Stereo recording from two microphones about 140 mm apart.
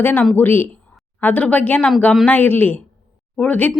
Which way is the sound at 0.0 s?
15° left (ahead or behind).